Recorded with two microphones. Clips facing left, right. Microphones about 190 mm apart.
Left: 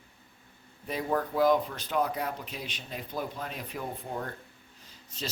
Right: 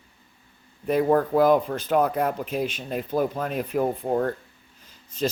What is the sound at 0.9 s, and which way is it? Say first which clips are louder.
Speech: right 10 dB; 55° right (ahead or behind).